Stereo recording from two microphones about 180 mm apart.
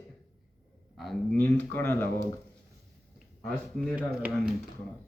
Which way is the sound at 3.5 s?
5° left (ahead or behind).